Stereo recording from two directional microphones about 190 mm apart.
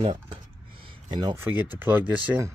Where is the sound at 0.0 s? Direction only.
25° right (ahead or behind); by 2.5 s 10° right (ahead or behind).